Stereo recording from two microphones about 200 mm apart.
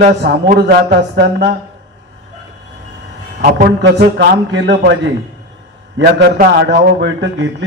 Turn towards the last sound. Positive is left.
turn(degrees=-60)  # may be behind; listen again after turning